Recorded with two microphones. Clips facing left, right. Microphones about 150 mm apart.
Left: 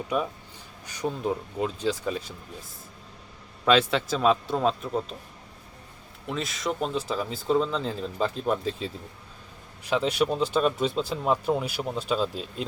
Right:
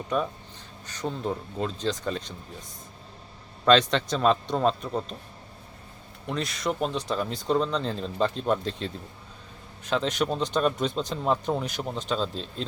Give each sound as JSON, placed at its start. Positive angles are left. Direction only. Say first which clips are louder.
{"t": 0.9, "sound": "speech", "louder": "left 2 dB", "side_deg": 10}
{"t": 3.7, "sound": "speech", "louder": "right 1 dB", "side_deg": 5}
{"t": 6.2, "sound": "speech", "louder": "right 1 dB", "side_deg": 0}